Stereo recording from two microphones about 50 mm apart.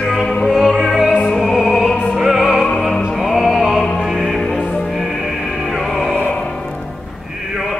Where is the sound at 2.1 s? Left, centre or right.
Centre.